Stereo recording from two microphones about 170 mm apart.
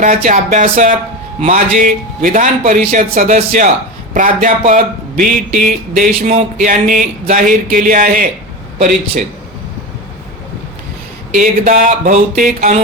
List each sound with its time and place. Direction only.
0.0 s speech: 50° right (ahead or behind)
11.3 s speech: 50° right (ahead or behind)